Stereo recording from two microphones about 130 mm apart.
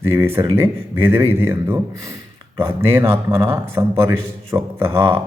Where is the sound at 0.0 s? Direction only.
20° right (ahead or behind).